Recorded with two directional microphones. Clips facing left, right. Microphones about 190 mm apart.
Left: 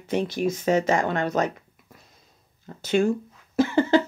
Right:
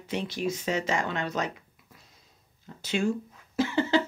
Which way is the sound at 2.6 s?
50° left (ahead or behind).